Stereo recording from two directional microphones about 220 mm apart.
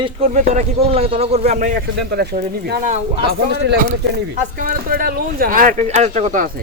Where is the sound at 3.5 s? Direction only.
50° right (ahead or behind).